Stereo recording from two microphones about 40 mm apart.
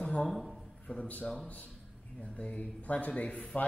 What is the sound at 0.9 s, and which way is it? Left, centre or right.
Speech, left.